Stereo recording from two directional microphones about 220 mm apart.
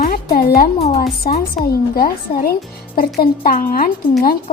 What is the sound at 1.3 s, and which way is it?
A woman's voice, 40° left (ahead or behind).